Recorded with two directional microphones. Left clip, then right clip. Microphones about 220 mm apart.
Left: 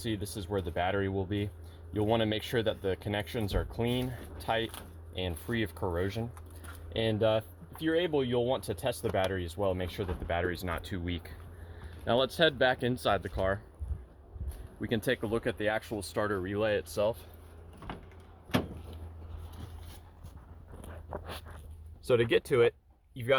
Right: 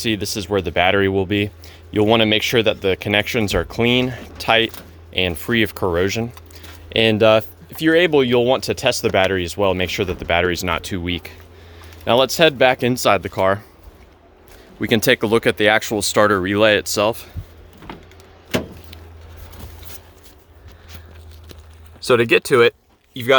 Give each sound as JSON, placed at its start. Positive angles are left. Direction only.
{"t": 0.0, "sound": "speech", "side_deg": -25}
{"t": 14.8, "sound": "speech", "side_deg": -40}
{"t": 22.0, "sound": "speech", "side_deg": -20}